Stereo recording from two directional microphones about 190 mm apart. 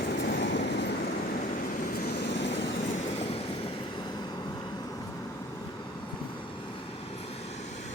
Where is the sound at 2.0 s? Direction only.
65° left (ahead or behind).